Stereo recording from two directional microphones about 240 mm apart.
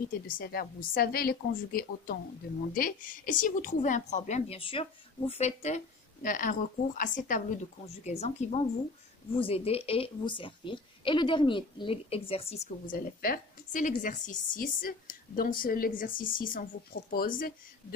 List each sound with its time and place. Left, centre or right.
0.3 s a woman's voice: left